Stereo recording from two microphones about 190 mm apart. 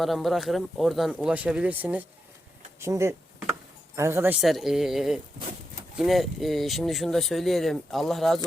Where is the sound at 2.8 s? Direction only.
15° right (ahead or behind).